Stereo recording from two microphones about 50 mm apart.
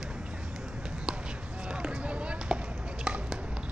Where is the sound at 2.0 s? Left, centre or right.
Right.